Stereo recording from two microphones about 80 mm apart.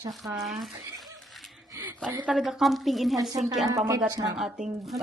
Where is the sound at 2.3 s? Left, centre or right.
Centre.